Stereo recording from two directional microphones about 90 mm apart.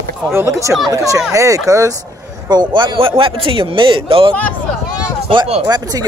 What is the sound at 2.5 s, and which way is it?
Speech, 60° right (ahead or behind).